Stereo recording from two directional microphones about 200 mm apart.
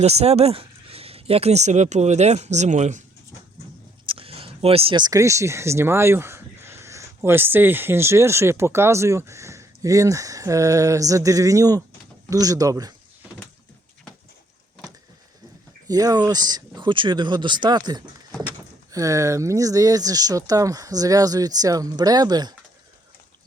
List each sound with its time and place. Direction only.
0.0 s speech: 30° right (ahead or behind)
4.0 s speech: 25° right (ahead or behind)
15.9 s speech: 20° right (ahead or behind)